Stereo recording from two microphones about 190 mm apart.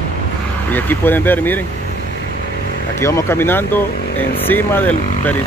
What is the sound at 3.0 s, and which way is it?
Speech, 15° left (ahead or behind).